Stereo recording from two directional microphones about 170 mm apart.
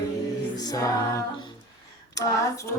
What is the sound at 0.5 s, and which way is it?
Music, 20° left (ahead or behind).